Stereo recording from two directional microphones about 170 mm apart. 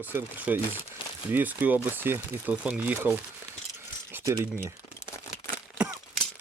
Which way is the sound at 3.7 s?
15° right (ahead or behind).